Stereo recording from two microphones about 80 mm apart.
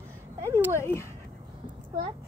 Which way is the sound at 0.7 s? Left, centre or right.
Left.